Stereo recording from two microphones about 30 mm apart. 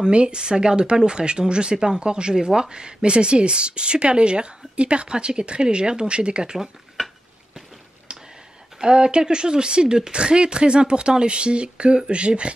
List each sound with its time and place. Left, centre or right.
0.0 s speech: right
8.1 s a sound: right
8.8 s speech: right